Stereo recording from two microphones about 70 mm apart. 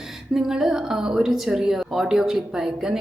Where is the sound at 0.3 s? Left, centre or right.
Centre.